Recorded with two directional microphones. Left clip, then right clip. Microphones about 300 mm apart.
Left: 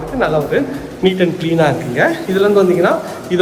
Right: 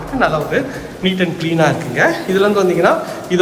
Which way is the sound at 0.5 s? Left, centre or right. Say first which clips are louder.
Left 1 dB; centre.